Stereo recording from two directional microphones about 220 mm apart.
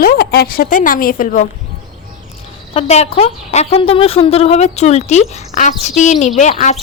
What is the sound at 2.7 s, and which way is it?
A woman's voice, 30° left (ahead or behind).